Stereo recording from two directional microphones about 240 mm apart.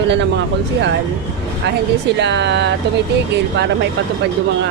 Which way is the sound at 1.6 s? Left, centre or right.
Right.